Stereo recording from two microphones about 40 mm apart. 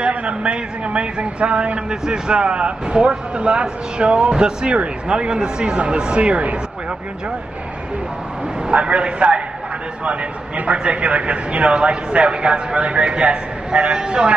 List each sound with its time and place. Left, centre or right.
0.0 s a man's voice: right
8.6 s a man's voice: right